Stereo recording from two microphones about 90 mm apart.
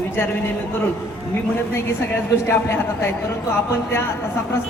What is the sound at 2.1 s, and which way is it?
A man's voice, 30° left (ahead or behind).